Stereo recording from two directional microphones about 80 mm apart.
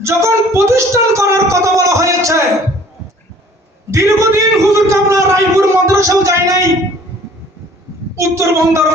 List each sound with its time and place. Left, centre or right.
0.0 s speech: right
3.9 s a man's voice: right
8.1 s a man's voice: right